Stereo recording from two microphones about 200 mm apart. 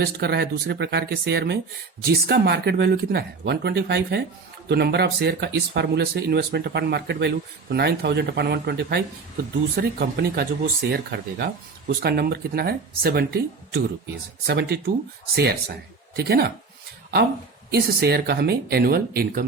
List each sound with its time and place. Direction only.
0.0 s speech: 55° right (ahead or behind)
17.7 s speech: 55° right (ahead or behind)